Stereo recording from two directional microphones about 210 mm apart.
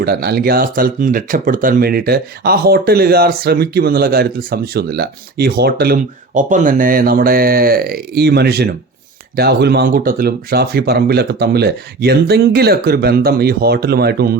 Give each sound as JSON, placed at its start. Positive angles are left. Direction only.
{"t": 0.0, "sound": "speech", "side_deg": -50}